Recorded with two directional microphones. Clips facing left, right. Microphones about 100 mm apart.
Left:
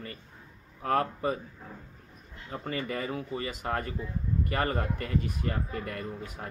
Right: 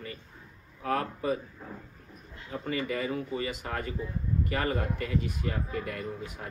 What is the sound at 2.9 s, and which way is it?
Speech, 40° left (ahead or behind).